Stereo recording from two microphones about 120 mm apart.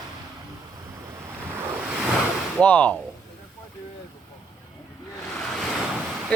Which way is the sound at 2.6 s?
10° left (ahead or behind).